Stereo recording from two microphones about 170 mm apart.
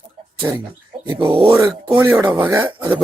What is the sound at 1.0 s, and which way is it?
Speech, 30° right (ahead or behind).